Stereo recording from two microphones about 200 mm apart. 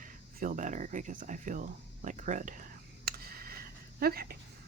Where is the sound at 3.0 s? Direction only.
50° right (ahead or behind).